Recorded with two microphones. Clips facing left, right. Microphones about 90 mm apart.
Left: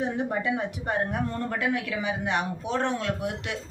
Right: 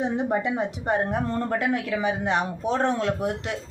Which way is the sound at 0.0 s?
20° right (ahead or behind).